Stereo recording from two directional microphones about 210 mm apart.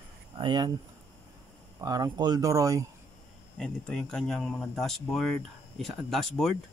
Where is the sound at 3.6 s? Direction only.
5° left (ahead or behind).